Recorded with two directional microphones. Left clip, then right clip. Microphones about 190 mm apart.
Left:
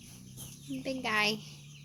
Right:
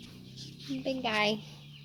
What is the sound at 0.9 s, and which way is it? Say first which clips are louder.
Speech: right 1 dB; 20° left (ahead or behind).